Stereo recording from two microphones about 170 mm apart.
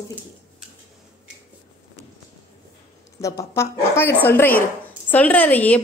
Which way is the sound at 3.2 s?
20° left (ahead or behind).